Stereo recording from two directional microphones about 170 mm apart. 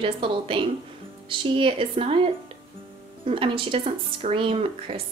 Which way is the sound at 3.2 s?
30° right (ahead or behind).